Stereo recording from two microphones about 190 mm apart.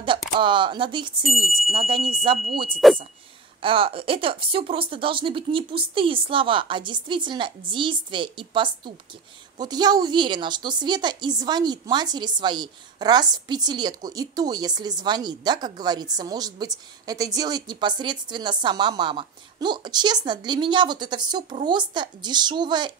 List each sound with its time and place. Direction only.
0.4 s a woman's voice: 25° right (ahead or behind)
1.2 s speech: centre (ahead or behind)
1.7 s a woman's voice: 25° right (ahead or behind)